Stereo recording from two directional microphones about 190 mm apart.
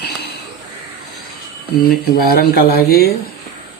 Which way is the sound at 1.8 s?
55° left (ahead or behind).